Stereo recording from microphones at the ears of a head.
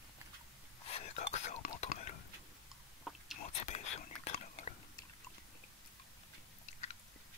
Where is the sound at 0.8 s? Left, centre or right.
Left.